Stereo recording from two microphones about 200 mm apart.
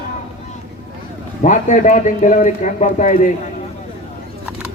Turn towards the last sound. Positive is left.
turn(degrees=40)  # may be behind; listen again after turning